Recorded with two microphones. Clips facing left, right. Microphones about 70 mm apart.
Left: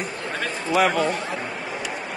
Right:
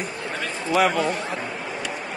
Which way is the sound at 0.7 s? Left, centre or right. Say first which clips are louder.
Even; centre.